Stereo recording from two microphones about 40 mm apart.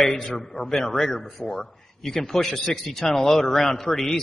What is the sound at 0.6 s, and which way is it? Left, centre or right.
A man's voice, centre.